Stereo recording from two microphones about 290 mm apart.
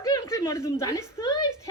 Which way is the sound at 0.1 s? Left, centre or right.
Centre.